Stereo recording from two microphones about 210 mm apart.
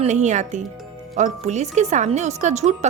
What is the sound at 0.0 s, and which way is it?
Speech, 35° right (ahead or behind).